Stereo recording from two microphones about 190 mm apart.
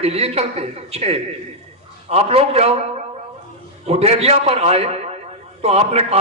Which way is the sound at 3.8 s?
30° right (ahead or behind).